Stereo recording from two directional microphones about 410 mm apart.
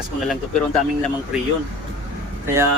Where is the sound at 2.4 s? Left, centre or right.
Centre.